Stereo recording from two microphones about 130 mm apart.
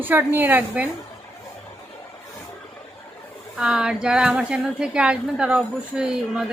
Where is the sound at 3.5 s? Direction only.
5° right (ahead or behind).